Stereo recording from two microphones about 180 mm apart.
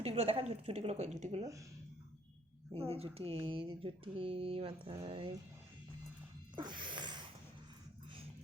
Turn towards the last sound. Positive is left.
turn(degrees=-25)  # may be behind; listen again after turning